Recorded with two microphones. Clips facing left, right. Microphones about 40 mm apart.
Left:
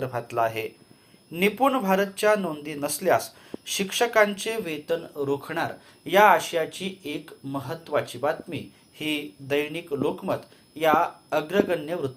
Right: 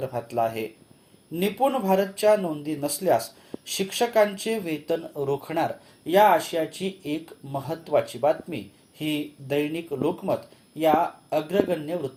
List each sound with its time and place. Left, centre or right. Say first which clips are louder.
0.0 s speech: even; left
2.4 s speech: right 1 dB; left
2.6 s speech: even; left
5.5 s speech: right 3 dB; centre
6.1 s speech: left 1 dB; left
6.5 s speech: even; left
9.0 s speech: right 1 dB; left
10.8 s speech: even; left